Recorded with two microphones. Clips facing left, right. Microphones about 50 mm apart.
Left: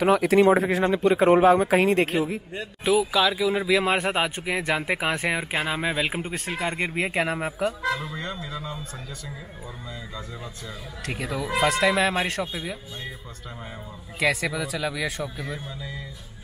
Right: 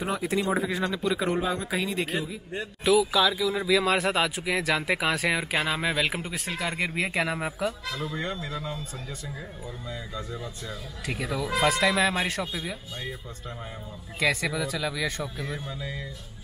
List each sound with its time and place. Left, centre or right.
0.0 s speech: left
0.8 s speech: left
1.3 s a man's voice: left
2.5 s speech: left
3.1 s speech: centre
3.8 s speech: left
6.3 s speech: left
7.0 s speech: centre
7.8 s speech: left
11.1 s speech: centre
14.2 s speech: centre